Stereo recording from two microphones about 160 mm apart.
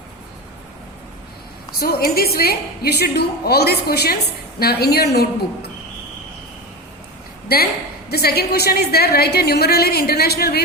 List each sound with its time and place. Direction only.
1.8 s a woman's voice: 70° left (ahead or behind)
7.4 s a sound: 75° left (ahead or behind)
8.1 s a woman's voice: 75° left (ahead or behind)